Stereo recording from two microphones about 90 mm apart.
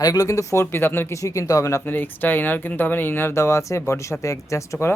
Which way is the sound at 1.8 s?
20° left (ahead or behind).